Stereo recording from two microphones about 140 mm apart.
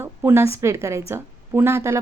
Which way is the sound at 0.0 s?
15° right (ahead or behind).